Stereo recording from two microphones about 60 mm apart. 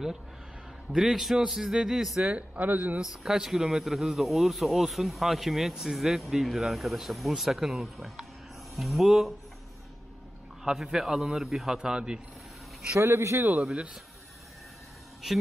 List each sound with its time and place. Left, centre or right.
0.9 s a man's voice: centre
2.3 s speech: right
3.0 s a man's voice: centre
10.6 s a man's voice: centre
12.9 s a man's voice: right